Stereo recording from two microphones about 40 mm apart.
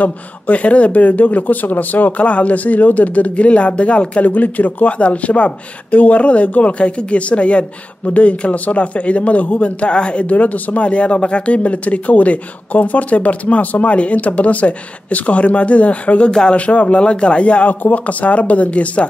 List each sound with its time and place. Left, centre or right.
0.0 s speech: left
2.2 s speech: left
10.3 s speech: left
16.3 s speech: centre
16.5 s speech: left